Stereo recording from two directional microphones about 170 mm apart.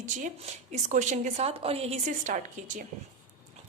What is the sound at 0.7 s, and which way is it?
A woman's voice, 45° right (ahead or behind).